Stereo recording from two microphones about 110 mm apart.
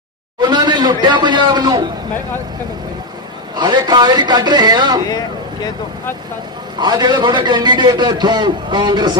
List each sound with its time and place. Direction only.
0.4 s a man's voice: 40° right (ahead or behind)
3.5 s a man's voice: 40° right (ahead or behind)
6.7 s a man's voice: 40° right (ahead or behind)